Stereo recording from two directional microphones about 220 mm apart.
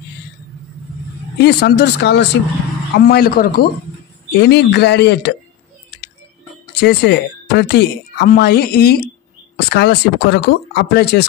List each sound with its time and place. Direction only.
1.4 s speech: 50° left (ahead or behind)
6.8 s speech: 50° left (ahead or behind)